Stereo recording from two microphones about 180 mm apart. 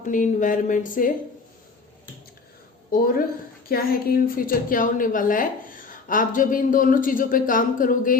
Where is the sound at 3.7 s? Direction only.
55° left (ahead or behind).